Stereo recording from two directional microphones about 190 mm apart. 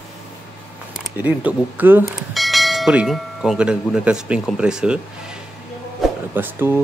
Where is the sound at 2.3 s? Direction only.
Centre (ahead or behind).